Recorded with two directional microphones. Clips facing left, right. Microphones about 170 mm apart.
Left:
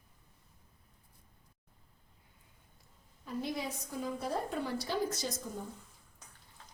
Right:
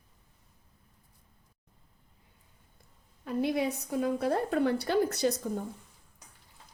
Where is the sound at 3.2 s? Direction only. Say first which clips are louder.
Right 8 dB; 65° right (ahead or behind).